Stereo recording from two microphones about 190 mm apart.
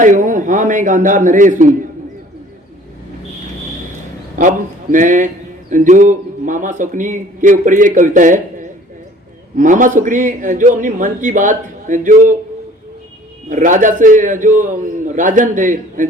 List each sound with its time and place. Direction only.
0.0 s a man's voice: 40° right (ahead or behind)
4.4 s a man's voice: 45° right (ahead or behind)
13.5 s a man's voice: 40° right (ahead or behind)